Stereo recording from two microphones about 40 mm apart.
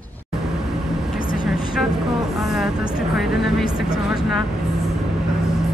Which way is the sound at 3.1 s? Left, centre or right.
Centre.